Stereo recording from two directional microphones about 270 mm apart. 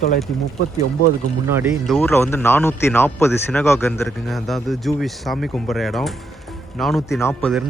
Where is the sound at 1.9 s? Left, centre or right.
Centre.